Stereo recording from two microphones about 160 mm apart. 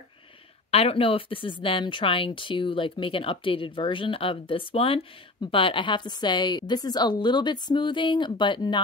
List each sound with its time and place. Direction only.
0.7 s speech: 40° left (ahead or behind)